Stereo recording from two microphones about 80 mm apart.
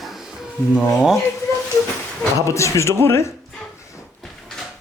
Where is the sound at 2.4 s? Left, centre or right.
Left.